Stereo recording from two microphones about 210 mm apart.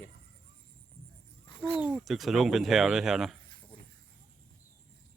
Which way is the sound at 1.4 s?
25° left (ahead or behind).